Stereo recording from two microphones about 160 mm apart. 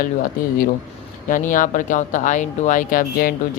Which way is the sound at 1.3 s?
55° left (ahead or behind).